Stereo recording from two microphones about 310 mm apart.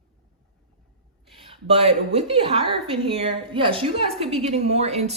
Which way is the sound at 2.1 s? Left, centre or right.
Centre.